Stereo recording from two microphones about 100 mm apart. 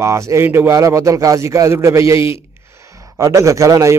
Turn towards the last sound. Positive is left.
turn(degrees=-30)  # may be behind; listen again after turning